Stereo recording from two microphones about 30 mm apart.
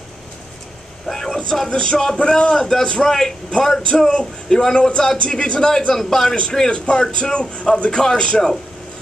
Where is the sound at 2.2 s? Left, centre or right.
Left.